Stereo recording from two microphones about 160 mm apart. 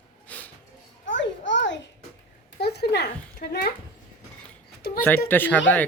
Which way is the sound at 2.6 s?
90° left.